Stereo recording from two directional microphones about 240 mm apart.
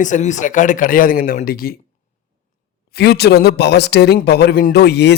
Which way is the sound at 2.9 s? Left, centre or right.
Left.